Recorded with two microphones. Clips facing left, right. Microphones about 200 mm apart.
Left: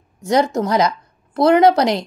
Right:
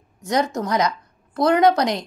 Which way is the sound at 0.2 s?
25° left (ahead or behind).